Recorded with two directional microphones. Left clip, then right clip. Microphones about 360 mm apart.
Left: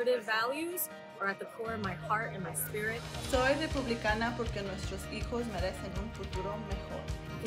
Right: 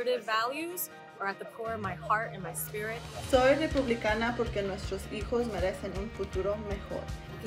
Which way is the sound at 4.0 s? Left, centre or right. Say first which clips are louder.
Right 3 dB; centre.